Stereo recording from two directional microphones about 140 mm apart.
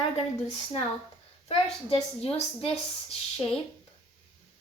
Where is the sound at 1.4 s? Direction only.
45° left (ahead or behind).